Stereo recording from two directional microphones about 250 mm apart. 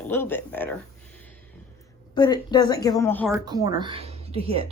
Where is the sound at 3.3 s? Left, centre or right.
Centre.